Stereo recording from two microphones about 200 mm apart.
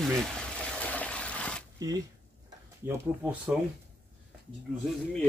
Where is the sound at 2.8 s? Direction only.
5° right (ahead or behind).